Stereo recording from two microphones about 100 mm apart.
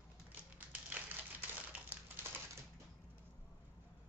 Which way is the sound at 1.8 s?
20° right (ahead or behind).